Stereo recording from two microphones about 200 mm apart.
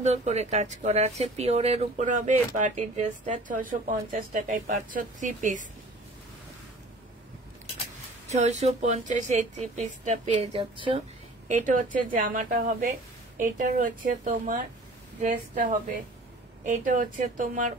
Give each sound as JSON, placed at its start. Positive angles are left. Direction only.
{"t": 0.0, "sound": "speech", "side_deg": -35}
{"t": 8.3, "sound": "speech", "side_deg": -35}
{"t": 11.4, "sound": "a woman's voice", "side_deg": -40}